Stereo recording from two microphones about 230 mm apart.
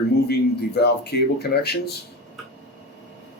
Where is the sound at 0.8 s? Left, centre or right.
Left.